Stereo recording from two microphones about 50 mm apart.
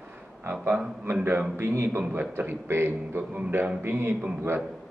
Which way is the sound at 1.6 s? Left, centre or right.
Right.